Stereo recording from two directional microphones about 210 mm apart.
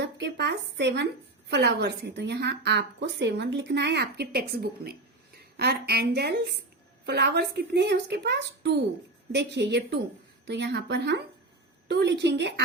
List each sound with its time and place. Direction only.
0.0 s a woman's voice: 55° right (ahead or behind)